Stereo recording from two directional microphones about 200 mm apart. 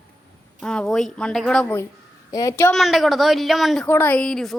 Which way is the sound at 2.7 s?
Centre (ahead or behind).